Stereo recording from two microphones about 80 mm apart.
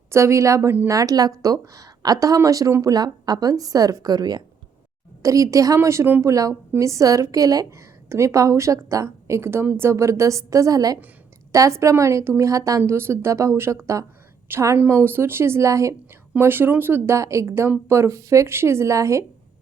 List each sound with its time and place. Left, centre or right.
0.1 s a woman's voice: right
2.8 s a woman's voice: right
5.2 s a woman's voice: right
8.1 s a woman's voice: right
12.8 s a woman's voice: right
14.5 s a woman's voice: right
16.4 s a woman's voice: right